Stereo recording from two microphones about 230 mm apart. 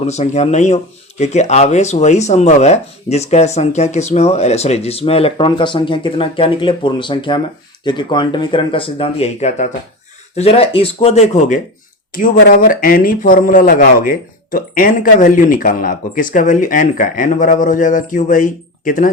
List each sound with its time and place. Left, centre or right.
0.0 s speech: left